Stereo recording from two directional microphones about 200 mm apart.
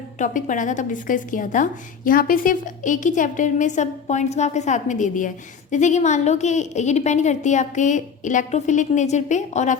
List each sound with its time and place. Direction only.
0.2 s a woman's voice: 40° left (ahead or behind)